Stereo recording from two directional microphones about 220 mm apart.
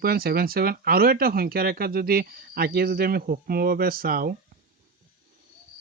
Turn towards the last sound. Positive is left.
turn(degrees=-40)  # may be behind; listen again after turning